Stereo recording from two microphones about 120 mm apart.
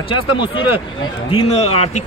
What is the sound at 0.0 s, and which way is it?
Speech, 45° left (ahead or behind).